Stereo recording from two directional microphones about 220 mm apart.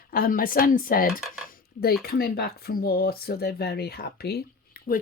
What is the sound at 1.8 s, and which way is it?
Speech, 45° left (ahead or behind).